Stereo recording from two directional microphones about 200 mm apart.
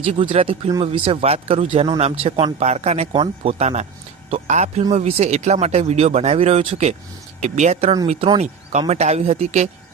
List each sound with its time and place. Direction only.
0.0 s speech: 25° right (ahead or behind)